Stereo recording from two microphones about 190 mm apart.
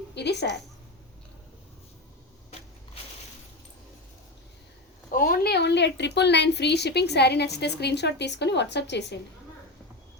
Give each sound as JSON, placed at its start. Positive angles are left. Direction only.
{"t": 0.1, "sound": "speech", "side_deg": 65}
{"t": 2.5, "sound": "crushing", "side_deg": 35}
{"t": 5.1, "sound": "speech", "side_deg": 50}